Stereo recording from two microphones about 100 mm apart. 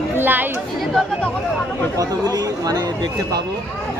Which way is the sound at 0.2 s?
20° right (ahead or behind).